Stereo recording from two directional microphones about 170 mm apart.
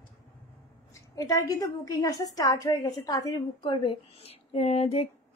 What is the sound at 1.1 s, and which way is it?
A woman's voice, 20° left (ahead or behind).